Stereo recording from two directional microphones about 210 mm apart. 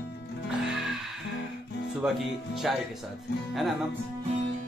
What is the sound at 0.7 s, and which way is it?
Music, centre (ahead or behind).